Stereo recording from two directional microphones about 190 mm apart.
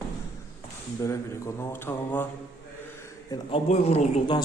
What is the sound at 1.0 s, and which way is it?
A man's voice, 15° left (ahead or behind).